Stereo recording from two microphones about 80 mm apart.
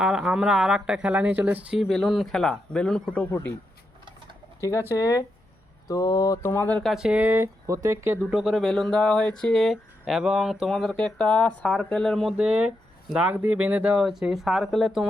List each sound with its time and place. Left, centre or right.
0.0 s speech: centre
1.9 s speech: centre
4.6 s speech: left
6.5 s speech: left
6.8 s speech: centre
7.2 s speech: right
8.3 s speech: centre
10.9 s speech: centre
12.4 s speech: centre